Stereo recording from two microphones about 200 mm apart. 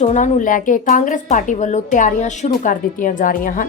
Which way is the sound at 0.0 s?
35° left (ahead or behind).